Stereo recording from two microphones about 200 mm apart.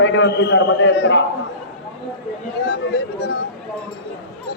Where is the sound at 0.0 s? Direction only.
65° left (ahead or behind).